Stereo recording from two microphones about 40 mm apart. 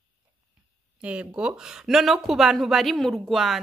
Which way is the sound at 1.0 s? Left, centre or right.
Right.